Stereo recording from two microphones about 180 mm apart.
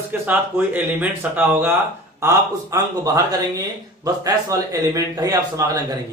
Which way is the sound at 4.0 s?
20° right (ahead or behind).